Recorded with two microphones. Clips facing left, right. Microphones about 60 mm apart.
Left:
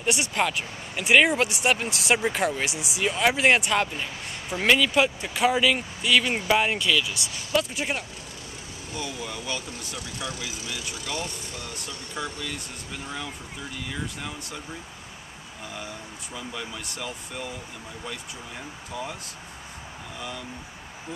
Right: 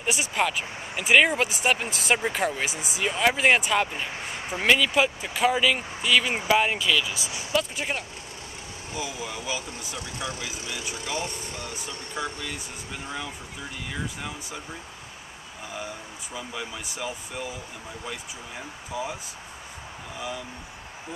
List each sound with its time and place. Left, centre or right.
0.0 s speech: centre
8.9 s speech: centre
9.9 s speech: right
11.2 s speech: right
12.2 s speech: centre
16.3 s speech: centre
18.9 s speech: centre
20.2 s speech: centre